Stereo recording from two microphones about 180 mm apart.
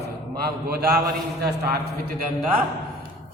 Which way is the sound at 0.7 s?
60° right (ahead or behind).